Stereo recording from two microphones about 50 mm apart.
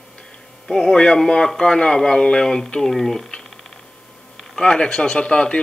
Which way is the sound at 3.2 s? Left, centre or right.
Centre.